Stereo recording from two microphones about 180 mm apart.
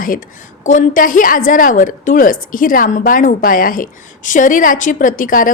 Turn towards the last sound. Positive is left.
turn(degrees=50)  # may be behind; listen again after turning